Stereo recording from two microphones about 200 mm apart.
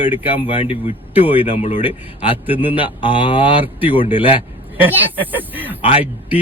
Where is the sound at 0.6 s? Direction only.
35° left (ahead or behind).